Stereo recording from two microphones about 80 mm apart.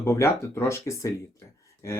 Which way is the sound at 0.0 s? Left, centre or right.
Left.